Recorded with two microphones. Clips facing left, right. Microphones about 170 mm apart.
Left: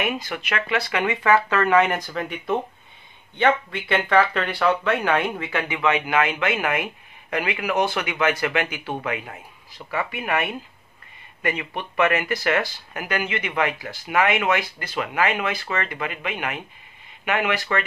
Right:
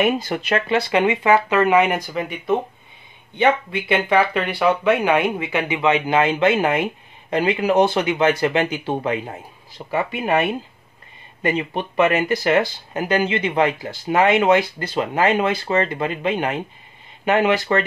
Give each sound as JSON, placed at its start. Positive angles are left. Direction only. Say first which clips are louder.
{"t": 0.0, "sound": "speech", "louder": "right 7 dB", "side_deg": -35}